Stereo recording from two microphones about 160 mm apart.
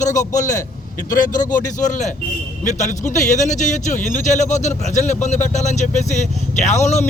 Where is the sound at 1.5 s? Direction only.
55° left (ahead or behind).